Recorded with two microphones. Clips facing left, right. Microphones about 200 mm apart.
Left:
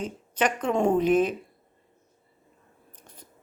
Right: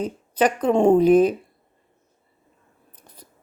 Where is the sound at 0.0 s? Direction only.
35° right (ahead or behind).